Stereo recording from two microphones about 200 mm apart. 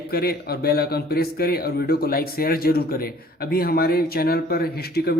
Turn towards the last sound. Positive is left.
turn(degrees=50)  # may be behind; listen again after turning